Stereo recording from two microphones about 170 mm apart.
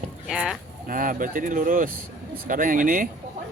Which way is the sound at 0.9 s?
55° right (ahead or behind).